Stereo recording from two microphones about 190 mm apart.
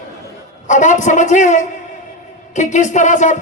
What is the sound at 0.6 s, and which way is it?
Speech, 40° left (ahead or behind).